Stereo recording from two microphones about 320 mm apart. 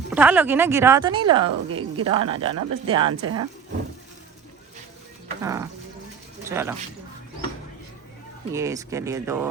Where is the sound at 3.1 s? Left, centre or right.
Right.